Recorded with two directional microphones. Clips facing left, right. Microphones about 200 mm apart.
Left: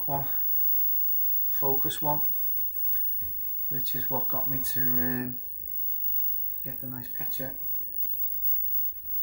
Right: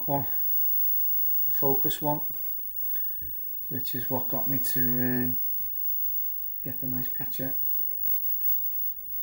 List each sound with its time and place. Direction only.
0.1 s speech: 15° right (ahead or behind)
1.5 s speech: 15° right (ahead or behind)
3.7 s speech: 20° right (ahead or behind)
6.6 s speech: 25° right (ahead or behind)